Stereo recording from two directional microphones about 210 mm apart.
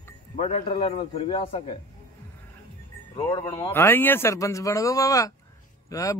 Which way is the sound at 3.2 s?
15° left (ahead or behind).